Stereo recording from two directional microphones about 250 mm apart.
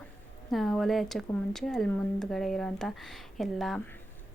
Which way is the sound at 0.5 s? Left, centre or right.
Centre.